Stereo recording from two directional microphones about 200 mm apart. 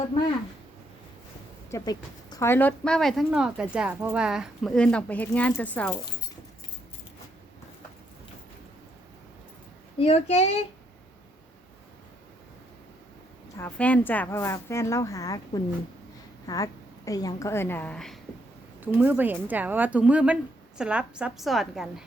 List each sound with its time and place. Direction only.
1.7 s speech: 20° left (ahead or behind)
10.0 s speech: 30° left (ahead or behind)
13.6 s a woman's voice: 5° left (ahead or behind)
18.8 s speech: 10° right (ahead or behind)